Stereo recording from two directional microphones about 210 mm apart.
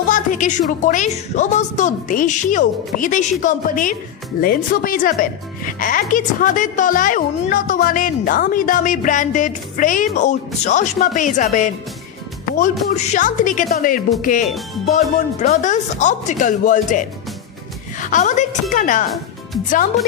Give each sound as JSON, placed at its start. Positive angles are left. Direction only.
{"t": 0.1, "sound": "speech", "side_deg": 35}